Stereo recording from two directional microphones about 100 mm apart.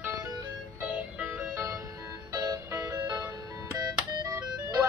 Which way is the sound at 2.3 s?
35° right (ahead or behind).